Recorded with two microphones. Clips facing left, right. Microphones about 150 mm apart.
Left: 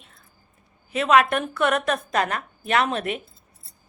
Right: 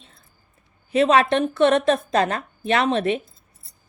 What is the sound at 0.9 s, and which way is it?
A woman's voice, 30° right (ahead or behind).